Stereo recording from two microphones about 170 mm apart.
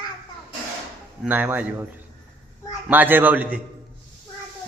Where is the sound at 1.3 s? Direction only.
10° right (ahead or behind).